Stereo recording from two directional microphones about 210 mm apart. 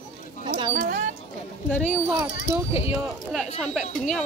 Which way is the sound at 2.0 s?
10° right (ahead or behind).